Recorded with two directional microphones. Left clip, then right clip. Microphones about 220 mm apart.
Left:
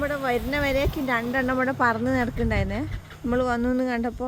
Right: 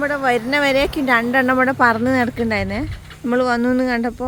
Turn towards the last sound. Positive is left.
turn(degrees=-5)  # may be behind; listen again after turning